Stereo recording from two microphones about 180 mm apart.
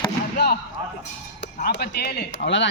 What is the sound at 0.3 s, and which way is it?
Basketball bounce, 65° left (ahead or behind).